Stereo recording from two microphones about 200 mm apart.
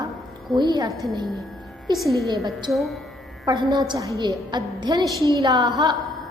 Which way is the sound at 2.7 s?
Centre (ahead or behind).